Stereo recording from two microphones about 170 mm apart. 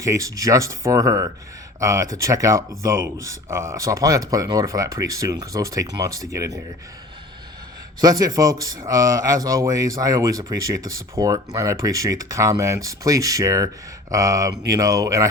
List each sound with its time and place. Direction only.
0.0 s a man's voice: 20° right (ahead or behind)
8.0 s a man's voice: 20° right (ahead or behind)